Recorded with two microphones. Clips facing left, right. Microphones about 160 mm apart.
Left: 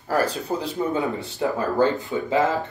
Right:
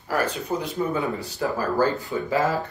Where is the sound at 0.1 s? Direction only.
35° left (ahead or behind).